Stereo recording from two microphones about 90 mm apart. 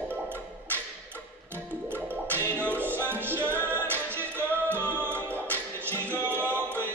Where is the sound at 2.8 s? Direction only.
25° right (ahead or behind).